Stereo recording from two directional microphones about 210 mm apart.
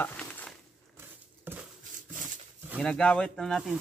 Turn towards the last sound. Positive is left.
turn(degrees=0)  # may be behind; listen again after turning